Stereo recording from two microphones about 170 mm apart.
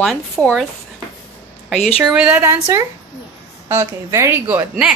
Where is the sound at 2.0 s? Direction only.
10° right (ahead or behind).